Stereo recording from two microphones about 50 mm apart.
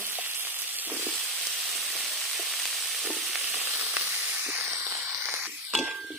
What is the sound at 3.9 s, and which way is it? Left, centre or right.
Sizzle, right.